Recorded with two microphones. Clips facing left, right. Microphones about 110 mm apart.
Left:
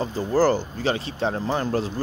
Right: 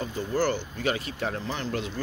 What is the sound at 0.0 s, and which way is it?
Speech, 35° left (ahead or behind).